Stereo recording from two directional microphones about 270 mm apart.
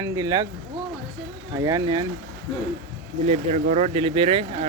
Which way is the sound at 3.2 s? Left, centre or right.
Right.